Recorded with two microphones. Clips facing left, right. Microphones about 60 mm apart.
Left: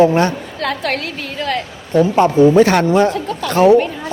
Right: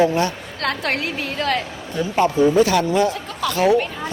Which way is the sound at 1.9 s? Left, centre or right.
Left.